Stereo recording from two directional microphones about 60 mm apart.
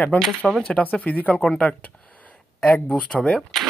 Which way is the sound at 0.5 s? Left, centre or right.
Centre.